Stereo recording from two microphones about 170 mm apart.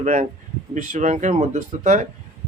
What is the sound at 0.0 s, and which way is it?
Speech, 45° right (ahead or behind).